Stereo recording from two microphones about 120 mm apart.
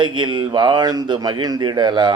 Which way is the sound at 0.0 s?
40° right (ahead or behind).